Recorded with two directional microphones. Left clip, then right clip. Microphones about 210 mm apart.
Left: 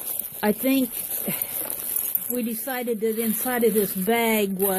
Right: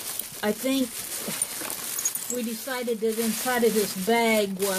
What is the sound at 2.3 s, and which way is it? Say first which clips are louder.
Speech: left 5 dB; 15° left (ahead or behind).